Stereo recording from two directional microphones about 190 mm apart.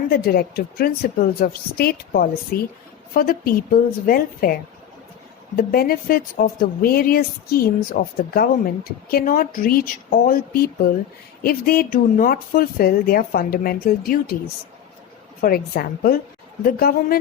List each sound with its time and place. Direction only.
0.1 s speech: 55° left (ahead or behind)
5.5 s speech: 50° left (ahead or behind)
15.4 s speech: 50° left (ahead or behind)